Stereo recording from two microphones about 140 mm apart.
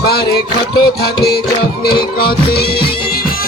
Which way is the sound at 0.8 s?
35° left (ahead or behind).